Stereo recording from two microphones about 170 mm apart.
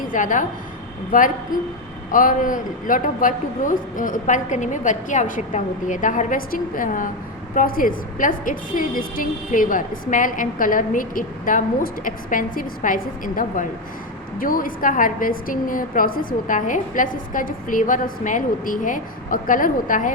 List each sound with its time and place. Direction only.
0.1 s a woman's voice: 50° left (ahead or behind)